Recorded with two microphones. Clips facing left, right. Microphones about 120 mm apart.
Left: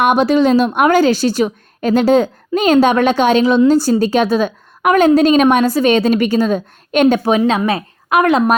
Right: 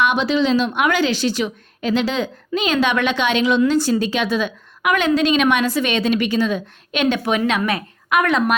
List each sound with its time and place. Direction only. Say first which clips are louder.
0.0 s a woman's voice: left 6 dB; 50° left (ahead or behind); by 8.5 s 35° left (ahead or behind)